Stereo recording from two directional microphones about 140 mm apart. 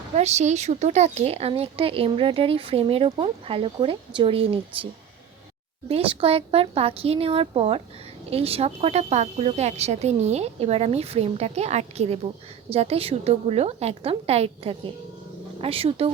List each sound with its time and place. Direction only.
0.2 s speech: 55° right (ahead or behind)
5.9 s speech: 40° right (ahead or behind)